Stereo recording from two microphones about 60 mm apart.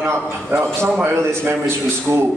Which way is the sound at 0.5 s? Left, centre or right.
Right.